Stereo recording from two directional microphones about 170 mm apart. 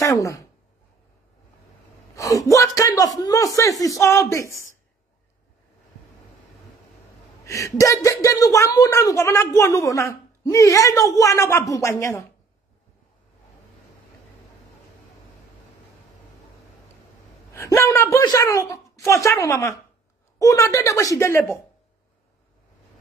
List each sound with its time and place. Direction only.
0.0 s speech: 20° left (ahead or behind)
2.1 s speech: 20° left (ahead or behind)
7.4 s a woman's voice: 20° left (ahead or behind)
17.5 s a woman's voice: 15° left (ahead or behind)